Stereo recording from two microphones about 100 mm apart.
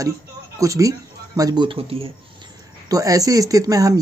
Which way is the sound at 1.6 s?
65° right (ahead or behind).